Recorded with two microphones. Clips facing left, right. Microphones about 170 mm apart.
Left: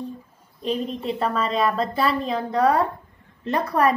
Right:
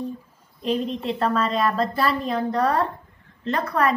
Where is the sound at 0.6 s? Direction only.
Centre (ahead or behind).